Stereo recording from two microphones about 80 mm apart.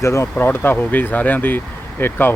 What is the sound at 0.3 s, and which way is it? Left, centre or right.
Speech, left.